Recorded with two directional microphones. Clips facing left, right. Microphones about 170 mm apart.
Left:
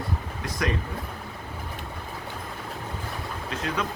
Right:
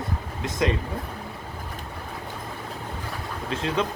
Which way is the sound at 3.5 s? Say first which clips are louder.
Right 4 dB; 25° right (ahead or behind).